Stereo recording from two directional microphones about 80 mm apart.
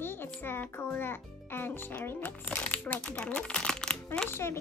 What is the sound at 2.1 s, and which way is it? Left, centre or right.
Speech, left.